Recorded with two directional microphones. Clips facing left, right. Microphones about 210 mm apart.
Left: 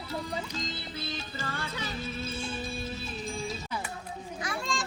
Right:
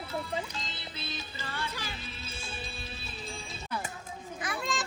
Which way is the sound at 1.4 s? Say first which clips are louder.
Left 2 dB; 45° left (ahead or behind).